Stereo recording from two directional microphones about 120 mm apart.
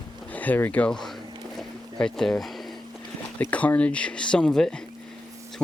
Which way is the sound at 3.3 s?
15° left (ahead or behind).